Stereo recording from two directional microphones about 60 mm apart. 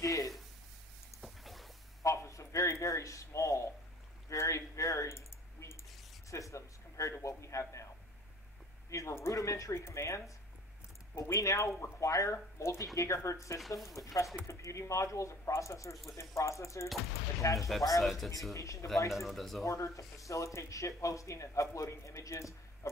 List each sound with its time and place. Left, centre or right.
0.0 s a sound: left
1.2 s boat: centre
2.0 s a sound: left
6.3 s a sound: left
8.9 s speech: left
9.3 s speech: left
13.6 s speech: centre
13.8 s speech: left
17.6 s speech: centre
18.5 s speech: left
19.1 s speech: centre
19.6 s speech: left